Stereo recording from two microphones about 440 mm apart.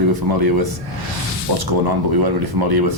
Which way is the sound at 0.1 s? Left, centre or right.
Right.